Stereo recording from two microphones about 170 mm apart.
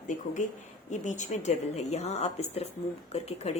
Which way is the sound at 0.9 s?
45° left (ahead or behind).